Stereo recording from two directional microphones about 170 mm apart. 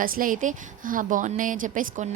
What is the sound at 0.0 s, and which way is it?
A woman's voice, 55° right (ahead or behind).